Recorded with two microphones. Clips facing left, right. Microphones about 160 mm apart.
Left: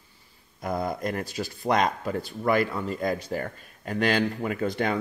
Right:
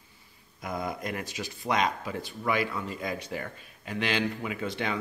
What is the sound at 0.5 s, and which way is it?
Speech, 35° left (ahead or behind).